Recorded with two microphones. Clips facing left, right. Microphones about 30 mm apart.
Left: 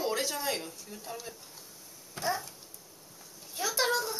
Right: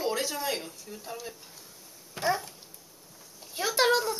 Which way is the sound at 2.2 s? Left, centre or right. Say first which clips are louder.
Right 4 dB; right.